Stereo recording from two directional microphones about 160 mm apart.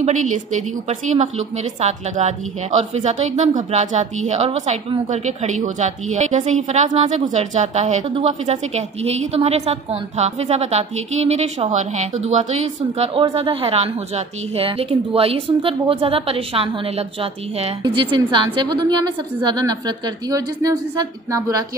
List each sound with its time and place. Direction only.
0.0 s a woman's voice: 50° right (ahead or behind); by 21.6 s 20° right (ahead or behind)